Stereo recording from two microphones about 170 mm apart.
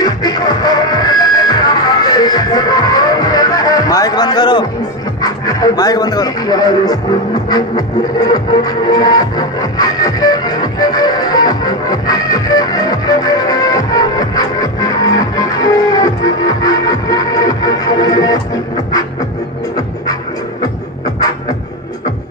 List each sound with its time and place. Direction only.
0.0 s music: 25° left (ahead or behind)
5.2 s speech: 20° left (ahead or behind)
7.4 s music: 25° left (ahead or behind)